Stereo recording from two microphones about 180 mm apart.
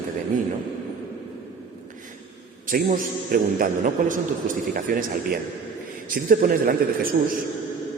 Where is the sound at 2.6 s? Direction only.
50° right (ahead or behind).